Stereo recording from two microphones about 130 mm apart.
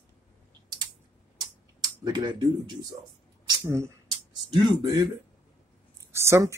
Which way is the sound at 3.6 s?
20° right (ahead or behind).